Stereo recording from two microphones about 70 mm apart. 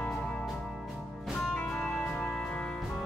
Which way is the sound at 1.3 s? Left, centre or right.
Centre.